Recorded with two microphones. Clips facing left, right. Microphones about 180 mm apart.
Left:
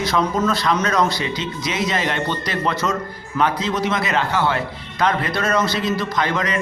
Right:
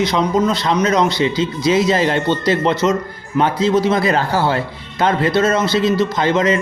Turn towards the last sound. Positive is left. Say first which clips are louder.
# right 6 dB
turn(degrees=-25)  # may be behind; listen again after turning